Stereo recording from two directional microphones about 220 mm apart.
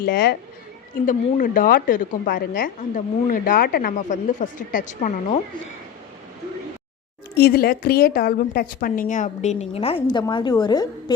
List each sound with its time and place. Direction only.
0.0 s a woman's voice: 45° left (ahead or behind)
7.3 s a woman's voice: 45° left (ahead or behind); by 10.8 s 20° left (ahead or behind)